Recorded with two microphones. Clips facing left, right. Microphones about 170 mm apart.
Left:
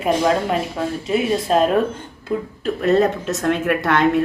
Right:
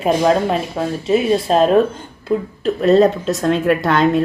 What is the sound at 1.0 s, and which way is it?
Speech, 30° right (ahead or behind).